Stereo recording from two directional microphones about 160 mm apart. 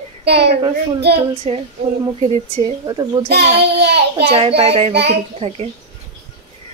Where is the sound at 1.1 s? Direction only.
35° right (ahead or behind).